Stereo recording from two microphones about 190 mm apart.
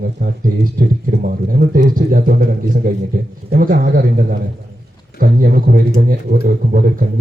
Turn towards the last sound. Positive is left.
turn(degrees=-50)  # may be behind; listen again after turning